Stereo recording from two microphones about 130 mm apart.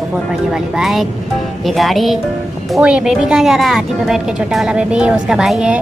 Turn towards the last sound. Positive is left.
turn(degrees=-5)  # may be behind; listen again after turning